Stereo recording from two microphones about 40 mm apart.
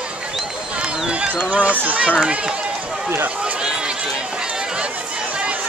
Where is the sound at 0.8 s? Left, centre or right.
Right.